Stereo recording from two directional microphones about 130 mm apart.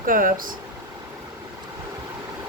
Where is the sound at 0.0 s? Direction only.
90° right.